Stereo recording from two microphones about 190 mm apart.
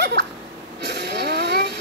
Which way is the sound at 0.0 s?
65° right (ahead or behind).